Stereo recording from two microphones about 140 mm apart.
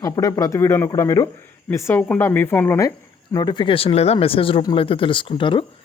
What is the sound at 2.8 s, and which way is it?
A woman's voice, 25° left (ahead or behind).